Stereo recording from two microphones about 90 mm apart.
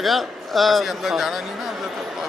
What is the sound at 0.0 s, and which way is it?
Speech, centre (ahead or behind).